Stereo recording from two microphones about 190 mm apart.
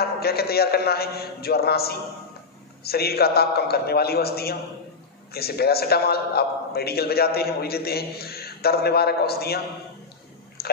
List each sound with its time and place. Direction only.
0.0 s a man's voice: 55° left (ahead or behind)
10.6 s chewing: 55° left (ahead or behind)